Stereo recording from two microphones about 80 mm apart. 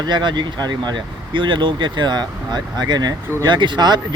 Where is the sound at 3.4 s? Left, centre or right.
Right.